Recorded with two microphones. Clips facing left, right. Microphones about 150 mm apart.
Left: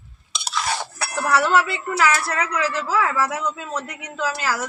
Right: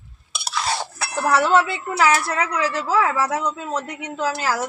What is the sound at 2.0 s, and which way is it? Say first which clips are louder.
Speech: right 2 dB; 30° right (ahead or behind).